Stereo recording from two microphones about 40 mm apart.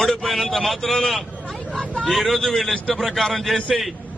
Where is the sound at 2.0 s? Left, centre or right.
Centre.